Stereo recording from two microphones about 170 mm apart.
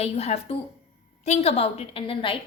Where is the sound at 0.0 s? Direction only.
40° left (ahead or behind).